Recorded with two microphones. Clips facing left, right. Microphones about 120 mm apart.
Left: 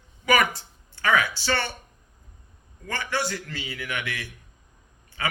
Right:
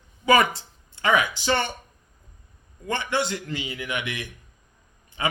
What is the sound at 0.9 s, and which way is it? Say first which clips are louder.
Speech: right 1 dB; 20° right (ahead or behind).